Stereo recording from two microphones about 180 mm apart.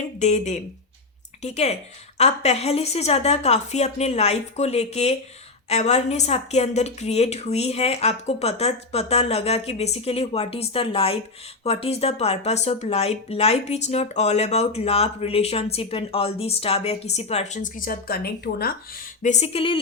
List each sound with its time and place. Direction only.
0.2 s speech: 40° left (ahead or behind); by 18.7 s 60° left (ahead or behind)
19.2 s speech: 40° left (ahead or behind)